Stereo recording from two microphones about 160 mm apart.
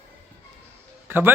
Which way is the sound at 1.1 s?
15° right (ahead or behind).